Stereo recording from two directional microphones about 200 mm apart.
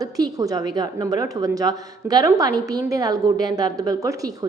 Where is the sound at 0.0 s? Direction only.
20° right (ahead or behind).